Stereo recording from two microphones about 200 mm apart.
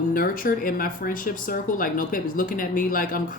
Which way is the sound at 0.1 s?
45° left (ahead or behind).